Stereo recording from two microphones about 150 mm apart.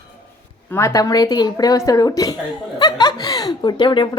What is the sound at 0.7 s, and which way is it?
A woman's voice, 20° left (ahead or behind).